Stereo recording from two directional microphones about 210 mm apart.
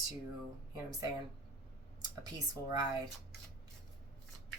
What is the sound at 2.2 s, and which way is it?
Speech, 20° right (ahead or behind).